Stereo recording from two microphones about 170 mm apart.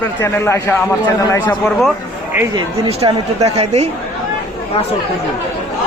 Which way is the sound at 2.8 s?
35° right (ahead or behind).